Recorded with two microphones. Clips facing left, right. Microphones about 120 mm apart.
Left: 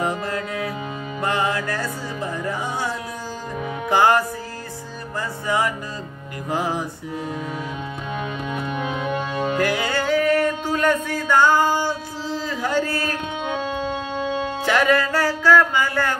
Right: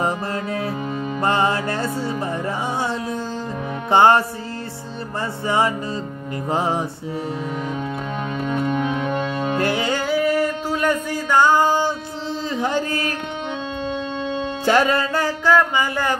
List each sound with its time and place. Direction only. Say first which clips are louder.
0.0 s music: right 1 dB; 30° right (ahead or behind)
3.9 s music: right 3 dB; 30° right (ahead or behind)
6.5 s music: right 2 dB; 25° right (ahead or behind)
8.5 s music: right 7 dB; 10° left (ahead or behind)
9.5 s music: right 1 dB; 25° right (ahead or behind)
14.6 s music: right 2 dB; 35° right (ahead or behind)